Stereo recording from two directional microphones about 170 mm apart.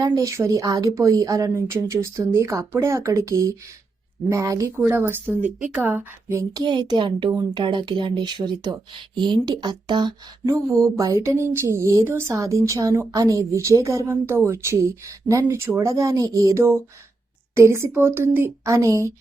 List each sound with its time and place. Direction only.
0.0 s speech: 20° right (ahead or behind)